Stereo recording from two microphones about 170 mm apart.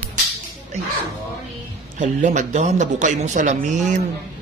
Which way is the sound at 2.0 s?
45° right (ahead or behind).